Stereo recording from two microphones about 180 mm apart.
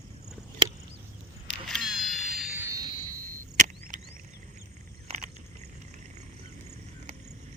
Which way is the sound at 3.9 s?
45° right (ahead or behind).